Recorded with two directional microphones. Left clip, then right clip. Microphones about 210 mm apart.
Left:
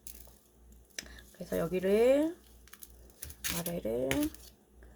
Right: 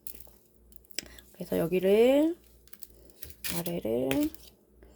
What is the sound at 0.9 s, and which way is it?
Speech, 35° right (ahead or behind).